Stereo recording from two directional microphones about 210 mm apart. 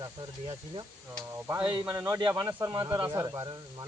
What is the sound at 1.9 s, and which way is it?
Speech, 15° right (ahead or behind).